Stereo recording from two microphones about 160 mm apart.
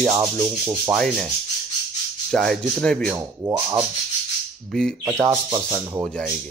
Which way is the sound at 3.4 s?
20° right (ahead or behind).